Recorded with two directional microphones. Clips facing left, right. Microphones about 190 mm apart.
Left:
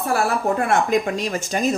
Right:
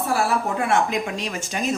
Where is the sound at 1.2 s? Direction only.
40° left (ahead or behind).